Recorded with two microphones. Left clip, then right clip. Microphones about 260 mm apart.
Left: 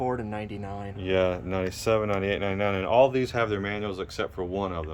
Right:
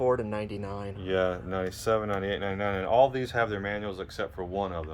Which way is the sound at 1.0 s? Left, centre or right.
Left.